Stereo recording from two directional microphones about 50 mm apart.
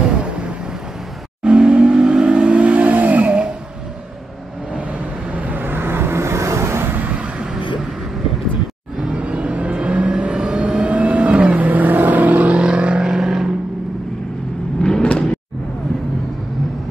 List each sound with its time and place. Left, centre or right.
1.4 s vehicle: centre; by 3.3 s right
5.3 s vehicle: right
5.7 s vehicle: right
6.9 s vehicle: right
7.2 s vehicle: right
9.0 s vehicle: right
12.5 s vehicle: right
13.1 s vehicle: centre
14.8 s a sound: centre